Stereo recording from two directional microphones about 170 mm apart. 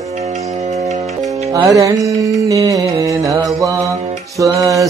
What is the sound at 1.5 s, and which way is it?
Music, 20° right (ahead or behind).